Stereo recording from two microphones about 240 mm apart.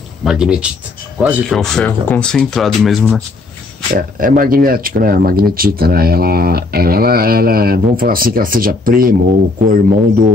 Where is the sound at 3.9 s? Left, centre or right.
Right.